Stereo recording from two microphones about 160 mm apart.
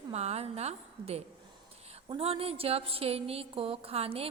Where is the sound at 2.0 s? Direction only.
35° right (ahead or behind).